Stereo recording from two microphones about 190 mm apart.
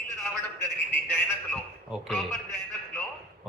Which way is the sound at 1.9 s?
Centre (ahead or behind).